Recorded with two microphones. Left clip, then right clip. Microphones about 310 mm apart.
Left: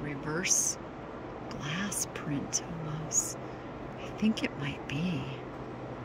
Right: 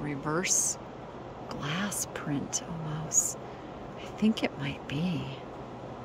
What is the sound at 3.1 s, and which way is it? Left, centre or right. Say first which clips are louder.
Speech: right 3 dB; right.